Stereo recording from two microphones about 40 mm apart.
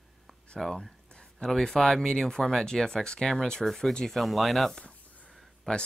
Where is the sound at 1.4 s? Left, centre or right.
Centre.